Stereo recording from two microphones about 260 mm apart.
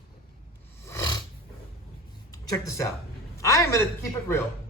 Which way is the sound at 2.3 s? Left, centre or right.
Centre.